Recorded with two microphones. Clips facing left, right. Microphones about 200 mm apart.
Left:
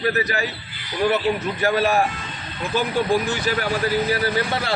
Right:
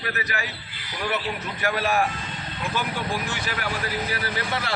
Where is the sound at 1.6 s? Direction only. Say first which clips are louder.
Left 3 dB; 30° left (ahead or behind).